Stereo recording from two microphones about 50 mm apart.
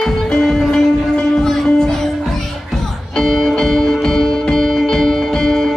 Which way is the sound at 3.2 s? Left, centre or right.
Centre.